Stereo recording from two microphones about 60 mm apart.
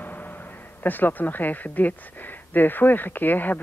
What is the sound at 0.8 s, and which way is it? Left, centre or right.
Speech, left.